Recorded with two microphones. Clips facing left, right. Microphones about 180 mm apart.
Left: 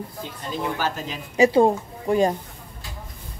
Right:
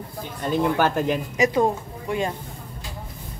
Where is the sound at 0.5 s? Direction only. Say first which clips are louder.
Right 6 dB; 55° right (ahead or behind).